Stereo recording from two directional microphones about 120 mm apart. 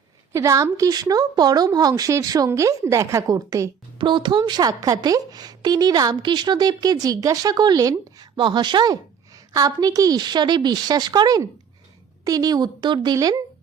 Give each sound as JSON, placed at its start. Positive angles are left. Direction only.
{"t": 0.3, "sound": "a woman's voice", "side_deg": -25}
{"t": 3.9, "sound": "speech", "side_deg": -40}